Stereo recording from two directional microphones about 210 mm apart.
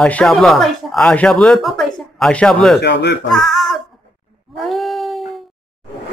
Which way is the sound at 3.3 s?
Centre (ahead or behind).